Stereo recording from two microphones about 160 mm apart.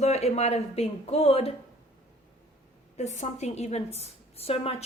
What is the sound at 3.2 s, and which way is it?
A woman's voice, 45° left (ahead or behind).